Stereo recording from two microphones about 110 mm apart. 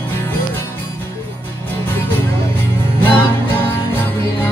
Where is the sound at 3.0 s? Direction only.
20° left (ahead or behind).